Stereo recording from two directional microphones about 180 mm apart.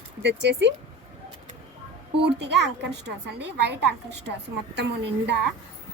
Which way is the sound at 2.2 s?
70° right (ahead or behind).